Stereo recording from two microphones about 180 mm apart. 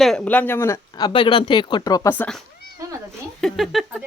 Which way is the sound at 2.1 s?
5° left (ahead or behind).